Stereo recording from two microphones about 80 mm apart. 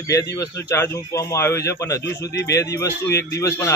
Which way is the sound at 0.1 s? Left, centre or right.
Left.